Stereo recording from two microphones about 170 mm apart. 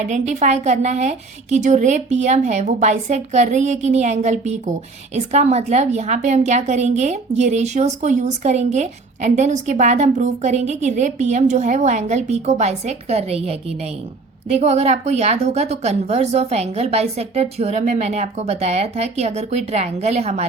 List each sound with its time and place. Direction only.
0.1 s a woman's voice: 45° right (ahead or behind)